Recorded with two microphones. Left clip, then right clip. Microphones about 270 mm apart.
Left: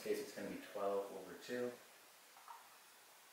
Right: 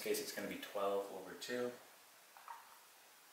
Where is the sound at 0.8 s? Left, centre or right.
Centre.